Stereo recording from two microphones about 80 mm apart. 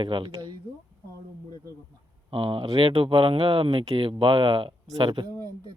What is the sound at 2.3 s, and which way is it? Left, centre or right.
Speech, right.